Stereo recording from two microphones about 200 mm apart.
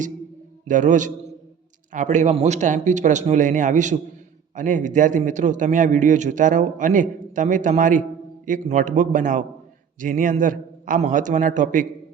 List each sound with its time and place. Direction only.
0.7 s a man's voice: 40° right (ahead or behind)